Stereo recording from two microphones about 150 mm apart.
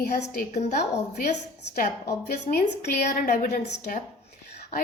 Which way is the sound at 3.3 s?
65° left (ahead or behind).